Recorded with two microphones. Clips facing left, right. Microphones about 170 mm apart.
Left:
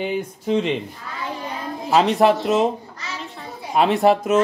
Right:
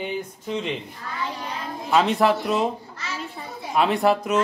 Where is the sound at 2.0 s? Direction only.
25° left (ahead or behind).